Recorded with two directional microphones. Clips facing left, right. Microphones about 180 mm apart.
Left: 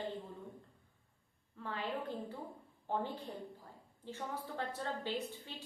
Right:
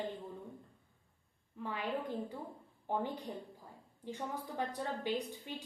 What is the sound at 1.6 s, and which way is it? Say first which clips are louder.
A woman's voice: right 2 dB; 15° right (ahead or behind).